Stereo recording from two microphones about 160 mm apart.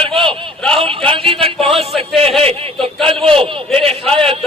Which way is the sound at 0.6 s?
5° left (ahead or behind).